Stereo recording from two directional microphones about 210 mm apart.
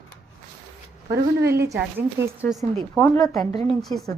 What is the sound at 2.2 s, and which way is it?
Speech, 10° right (ahead or behind).